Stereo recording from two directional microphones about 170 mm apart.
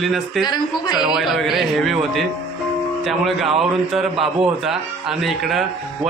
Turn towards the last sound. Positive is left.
turn(degrees=0)  # may be behind; listen again after turning